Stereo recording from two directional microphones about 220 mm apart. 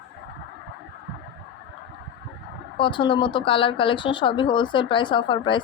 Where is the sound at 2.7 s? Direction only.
20° left (ahead or behind).